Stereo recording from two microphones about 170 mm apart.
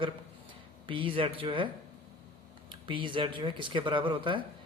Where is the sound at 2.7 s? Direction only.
30° right (ahead or behind).